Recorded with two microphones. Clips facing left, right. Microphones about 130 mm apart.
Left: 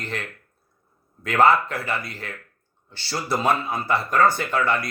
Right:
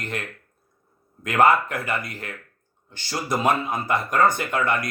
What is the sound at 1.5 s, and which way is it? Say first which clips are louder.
Speech: even; 50° right (ahead or behind).